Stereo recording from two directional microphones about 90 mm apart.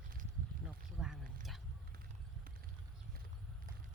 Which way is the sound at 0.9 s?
5° right (ahead or behind).